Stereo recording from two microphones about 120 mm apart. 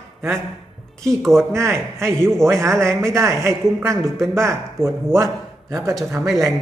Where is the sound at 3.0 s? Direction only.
25° right (ahead or behind).